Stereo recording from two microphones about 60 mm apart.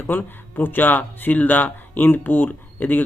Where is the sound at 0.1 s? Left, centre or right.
Left.